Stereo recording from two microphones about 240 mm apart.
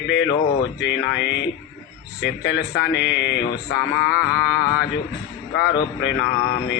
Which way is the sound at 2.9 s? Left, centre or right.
Left.